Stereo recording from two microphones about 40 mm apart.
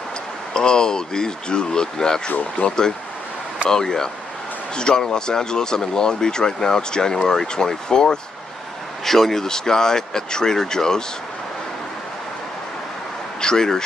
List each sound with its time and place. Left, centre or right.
0.6 s speech: centre
13.4 s speech: centre